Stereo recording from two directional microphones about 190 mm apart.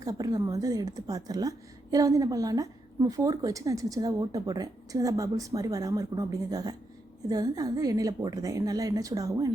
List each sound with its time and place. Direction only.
0.0 s a woman's voice: 20° right (ahead or behind)